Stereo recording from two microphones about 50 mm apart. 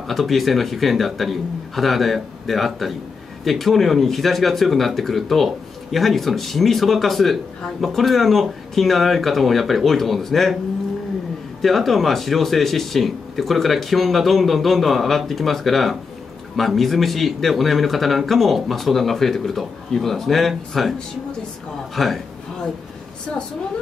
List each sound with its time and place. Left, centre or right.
0.1 s speech: centre
11.6 s speech: centre
21.9 s speech: centre